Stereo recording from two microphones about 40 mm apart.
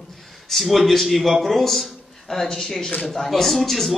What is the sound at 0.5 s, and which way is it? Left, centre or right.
A man's voice, centre.